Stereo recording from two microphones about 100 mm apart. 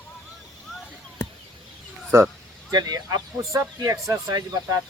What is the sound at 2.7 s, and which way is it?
Speech, 40° right (ahead or behind).